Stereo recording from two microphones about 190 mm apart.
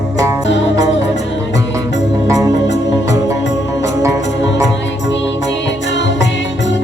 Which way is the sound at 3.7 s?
15° right (ahead or behind).